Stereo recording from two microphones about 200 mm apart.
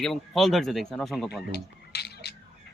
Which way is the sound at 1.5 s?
55° left (ahead or behind).